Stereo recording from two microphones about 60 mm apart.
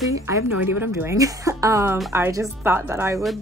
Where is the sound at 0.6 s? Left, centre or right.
Right.